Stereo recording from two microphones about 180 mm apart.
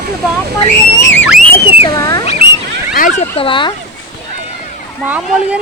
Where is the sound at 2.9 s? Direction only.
50° left (ahead or behind).